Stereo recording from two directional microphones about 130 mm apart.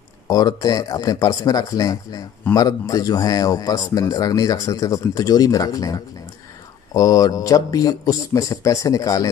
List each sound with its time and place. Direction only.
0.3 s speech: 30° left (ahead or behind)